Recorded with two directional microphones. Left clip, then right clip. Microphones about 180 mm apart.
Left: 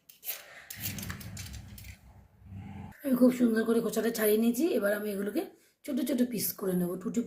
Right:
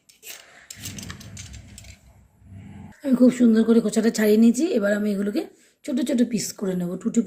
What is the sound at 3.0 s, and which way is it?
A woman's voice, 40° right (ahead or behind).